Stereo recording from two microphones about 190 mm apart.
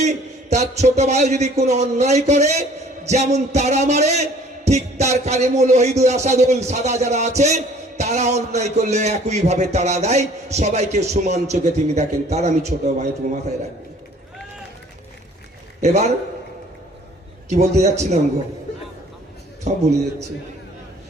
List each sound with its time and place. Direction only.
0.0 s a sound: 35° right (ahead or behind)
0.9 s speech: 35° right (ahead or behind)
15.8 s speech: 35° right (ahead or behind)
17.5 s speech: 35° right (ahead or behind)
19.7 s speech: 40° right (ahead or behind)